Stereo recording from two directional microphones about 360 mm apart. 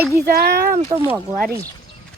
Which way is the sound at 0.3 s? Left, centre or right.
Right.